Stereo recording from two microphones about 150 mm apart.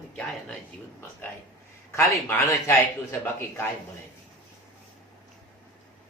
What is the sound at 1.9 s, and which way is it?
Mantra, 15° left (ahead or behind).